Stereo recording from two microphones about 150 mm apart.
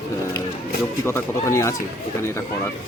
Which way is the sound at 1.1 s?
15° left (ahead or behind).